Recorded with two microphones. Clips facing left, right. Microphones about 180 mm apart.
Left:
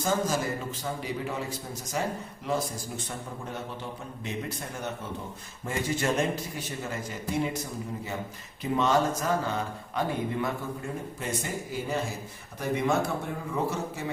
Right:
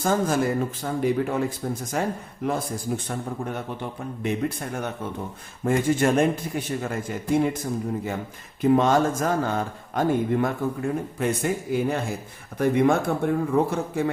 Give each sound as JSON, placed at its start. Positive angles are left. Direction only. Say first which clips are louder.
{"t": 0.0, "sound": "a man's voice", "louder": "right 5 dB", "side_deg": -55}
{"t": 4.2, "sound": "a man's voice", "louder": "right 9 dB", "side_deg": -55}